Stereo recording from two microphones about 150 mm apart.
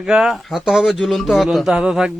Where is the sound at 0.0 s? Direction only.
5° right (ahead or behind).